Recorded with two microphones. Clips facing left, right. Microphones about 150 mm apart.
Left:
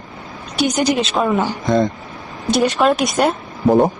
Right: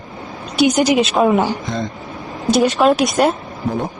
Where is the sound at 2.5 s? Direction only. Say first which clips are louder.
Right 2 dB; centre (ahead or behind).